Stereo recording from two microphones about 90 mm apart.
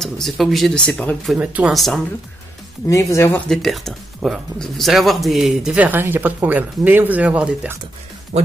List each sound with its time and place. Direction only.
0.0 s speech: centre (ahead or behind)
0.7 s speech: 15° left (ahead or behind)
1.4 s speech: 15° right (ahead or behind)
1.7 s speech: centre (ahead or behind)
2.9 s speech: 35° left (ahead or behind)
3.4 s speech: 5° left (ahead or behind)
5.8 s speech: 20° right (ahead or behind)